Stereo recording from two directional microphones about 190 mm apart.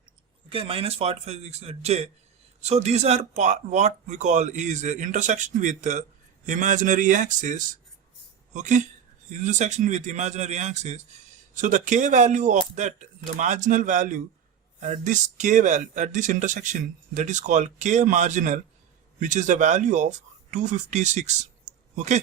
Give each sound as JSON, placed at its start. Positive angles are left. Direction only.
{"t": 0.5, "sound": "speech", "side_deg": -30}